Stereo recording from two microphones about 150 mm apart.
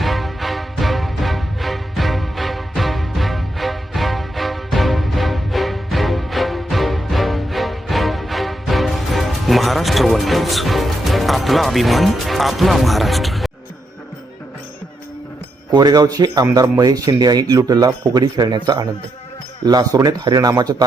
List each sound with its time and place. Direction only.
0.0 s music: centre (ahead or behind)
15.7 s speech: 25° right (ahead or behind)